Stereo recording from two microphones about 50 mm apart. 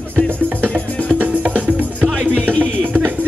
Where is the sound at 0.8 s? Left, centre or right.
Left.